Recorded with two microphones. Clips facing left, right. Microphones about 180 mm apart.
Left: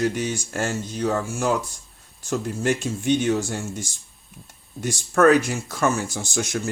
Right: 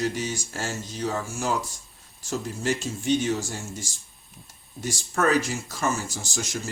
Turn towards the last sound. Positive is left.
turn(degrees=60)  # may be behind; listen again after turning